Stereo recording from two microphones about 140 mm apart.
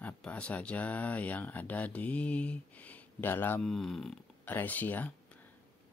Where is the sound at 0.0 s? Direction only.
10° left (ahead or behind).